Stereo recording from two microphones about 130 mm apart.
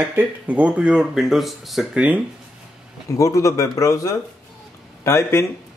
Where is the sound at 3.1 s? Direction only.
25° left (ahead or behind).